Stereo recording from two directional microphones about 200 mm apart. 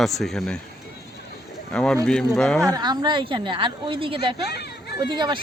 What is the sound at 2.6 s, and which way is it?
A woman's voice, 20° right (ahead or behind).